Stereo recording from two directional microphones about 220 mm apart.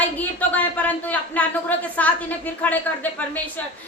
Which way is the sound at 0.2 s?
5° left (ahead or behind).